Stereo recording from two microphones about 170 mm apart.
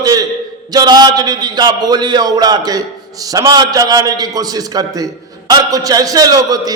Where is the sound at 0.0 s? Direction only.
20° right (ahead or behind).